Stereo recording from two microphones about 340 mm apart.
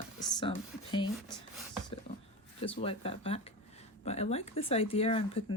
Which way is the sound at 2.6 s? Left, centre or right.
Centre.